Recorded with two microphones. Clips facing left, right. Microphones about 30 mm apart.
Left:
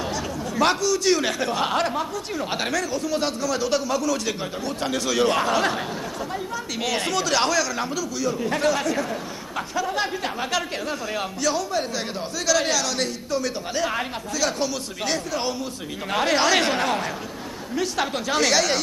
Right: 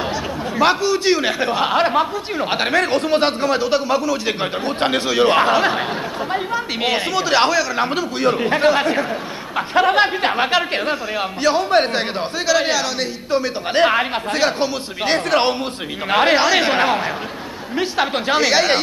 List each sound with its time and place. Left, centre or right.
0.6 s a man's voice: right
2.8 s speech: right
3.6 s a man's voice: right
4.4 s a man's voice: right
8.5 s a man's voice: right
11.7 s speech: right
12.4 s a man's voice: right
13.7 s a man's voice: right
16.3 s a man's voice: right
16.7 s a man's voice: right